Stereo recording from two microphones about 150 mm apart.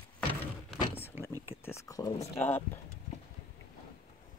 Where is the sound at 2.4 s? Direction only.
15° left (ahead or behind).